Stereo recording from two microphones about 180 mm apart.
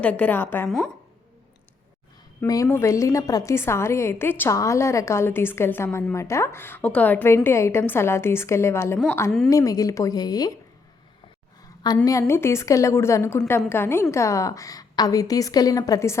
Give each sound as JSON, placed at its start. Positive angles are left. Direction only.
{"t": 0.0, "sound": "a woman's voice", "side_deg": 10}
{"t": 2.4, "sound": "a woman's voice", "side_deg": 15}
{"t": 11.8, "sound": "a woman's voice", "side_deg": 20}